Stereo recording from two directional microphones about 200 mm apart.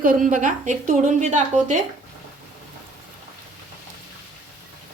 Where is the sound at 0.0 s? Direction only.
45° right (ahead or behind).